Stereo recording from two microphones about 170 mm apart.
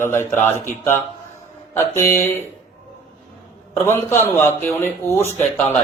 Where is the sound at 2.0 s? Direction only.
15° left (ahead or behind).